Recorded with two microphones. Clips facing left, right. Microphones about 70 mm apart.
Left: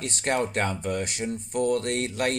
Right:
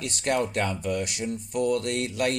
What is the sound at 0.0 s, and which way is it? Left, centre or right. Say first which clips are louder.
Speech: even; left.